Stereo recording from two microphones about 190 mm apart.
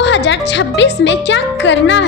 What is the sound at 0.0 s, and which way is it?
A woman's voice, 70° left (ahead or behind).